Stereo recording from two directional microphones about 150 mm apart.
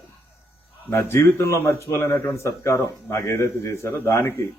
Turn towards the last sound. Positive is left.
turn(degrees=20)  # may be behind; listen again after turning